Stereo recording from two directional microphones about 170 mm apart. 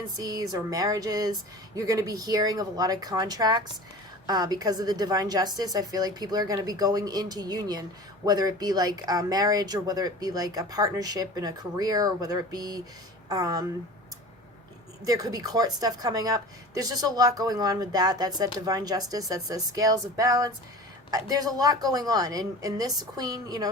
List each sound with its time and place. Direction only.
0.2 s a woman's voice: 20° right (ahead or behind)
15.0 s a woman's voice: 20° right (ahead or behind)